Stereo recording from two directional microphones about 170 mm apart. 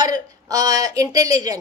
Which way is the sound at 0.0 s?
20° right (ahead or behind).